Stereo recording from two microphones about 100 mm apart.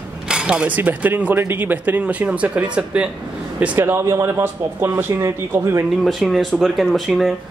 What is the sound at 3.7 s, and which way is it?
Speech, 25° right (ahead or behind).